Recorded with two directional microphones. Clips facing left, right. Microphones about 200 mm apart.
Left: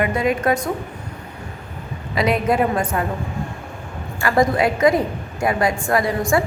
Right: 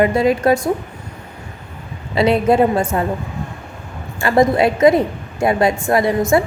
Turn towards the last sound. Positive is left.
turn(degrees=-25)  # may be behind; listen again after turning